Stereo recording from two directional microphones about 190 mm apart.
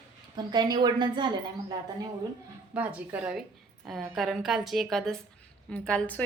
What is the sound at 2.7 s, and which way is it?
A woman's voice, 5° right (ahead or behind).